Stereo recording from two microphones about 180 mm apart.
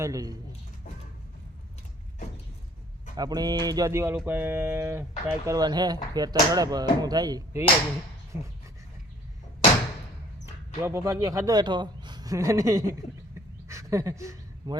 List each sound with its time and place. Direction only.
0.0 s speech: 20° right (ahead or behind)
3.2 s speech: 20° right (ahead or behind)
10.4 s speech: 15° right (ahead or behind)
13.7 s a sound: 15° right (ahead or behind)